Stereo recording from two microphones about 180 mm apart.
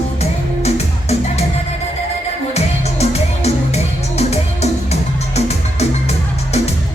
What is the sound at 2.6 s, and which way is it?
Music, 35° left (ahead or behind).